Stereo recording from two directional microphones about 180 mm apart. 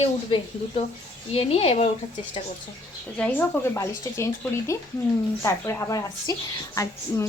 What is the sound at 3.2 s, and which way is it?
Speech, 10° left (ahead or behind).